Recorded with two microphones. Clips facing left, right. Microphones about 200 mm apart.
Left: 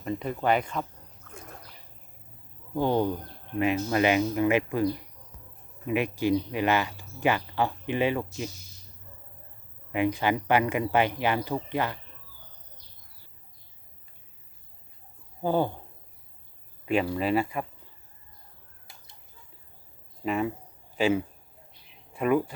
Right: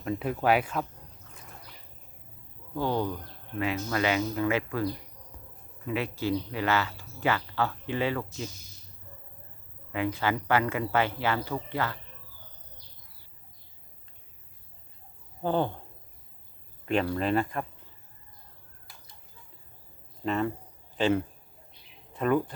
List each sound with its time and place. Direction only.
0.0 s speech: 5° right (ahead or behind)
2.7 s speech: 15° left (ahead or behind)
9.9 s speech: 15° left (ahead or behind)
15.4 s speech: 10° left (ahead or behind)
16.8 s speech: 5° left (ahead or behind)
20.2 s speech: 10° left (ahead or behind)